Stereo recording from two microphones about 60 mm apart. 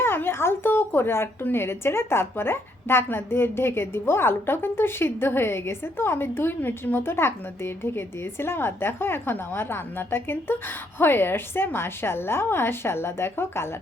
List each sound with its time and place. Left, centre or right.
0.0 s a woman's voice: left